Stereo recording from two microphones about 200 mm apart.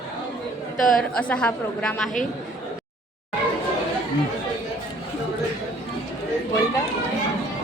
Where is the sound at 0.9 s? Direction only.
5° left (ahead or behind).